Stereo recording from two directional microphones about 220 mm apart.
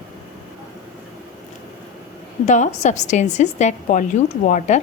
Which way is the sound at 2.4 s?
30° left (ahead or behind).